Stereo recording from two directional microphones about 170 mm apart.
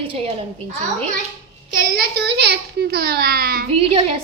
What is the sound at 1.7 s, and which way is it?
A child's voice, 60° right (ahead or behind).